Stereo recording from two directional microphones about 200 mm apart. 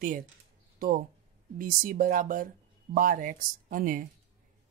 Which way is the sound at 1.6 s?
45° right (ahead or behind).